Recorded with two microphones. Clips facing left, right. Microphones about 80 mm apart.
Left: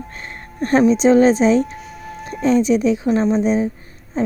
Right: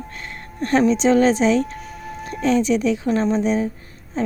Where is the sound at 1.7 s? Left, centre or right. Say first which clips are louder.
Even; centre.